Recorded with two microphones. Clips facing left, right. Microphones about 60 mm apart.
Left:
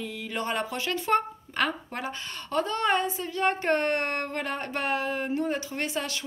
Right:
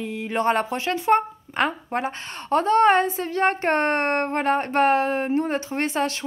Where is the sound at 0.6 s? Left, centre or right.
Right.